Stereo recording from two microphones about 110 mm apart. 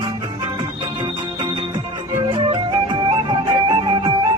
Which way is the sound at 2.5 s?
45° right (ahead or behind).